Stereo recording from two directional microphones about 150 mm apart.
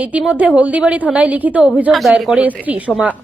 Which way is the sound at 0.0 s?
10° right (ahead or behind).